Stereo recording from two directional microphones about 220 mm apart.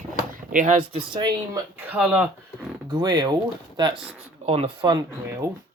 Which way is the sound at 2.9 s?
20° right (ahead or behind).